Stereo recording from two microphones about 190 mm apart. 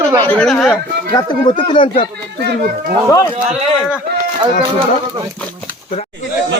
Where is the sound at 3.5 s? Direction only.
5° right (ahead or behind).